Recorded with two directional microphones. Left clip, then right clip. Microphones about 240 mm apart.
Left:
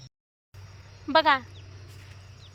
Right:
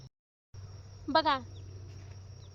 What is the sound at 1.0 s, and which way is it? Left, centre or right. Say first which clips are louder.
Speech: left 7 dB; centre.